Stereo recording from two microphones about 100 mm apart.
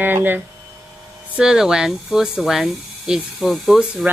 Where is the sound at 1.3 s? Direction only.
5° right (ahead or behind).